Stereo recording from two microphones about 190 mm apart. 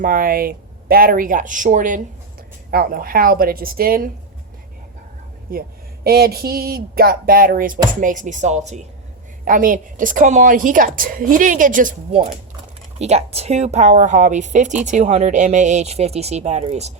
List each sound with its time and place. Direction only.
0.0 s a woman's voice: 45° right (ahead or behind)
5.5 s a woman's voice: 55° right (ahead or behind); by 16.9 s 35° right (ahead or behind)